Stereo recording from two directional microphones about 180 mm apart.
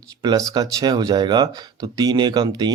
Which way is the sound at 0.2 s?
25° right (ahead or behind).